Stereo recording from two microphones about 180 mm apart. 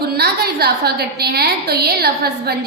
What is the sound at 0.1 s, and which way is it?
A woman's voice, 60° right (ahead or behind).